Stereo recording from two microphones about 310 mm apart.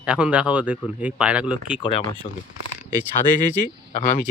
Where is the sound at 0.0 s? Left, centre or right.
Centre.